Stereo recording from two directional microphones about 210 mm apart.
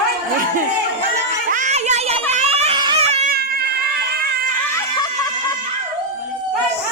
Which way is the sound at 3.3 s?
50° right (ahead or behind).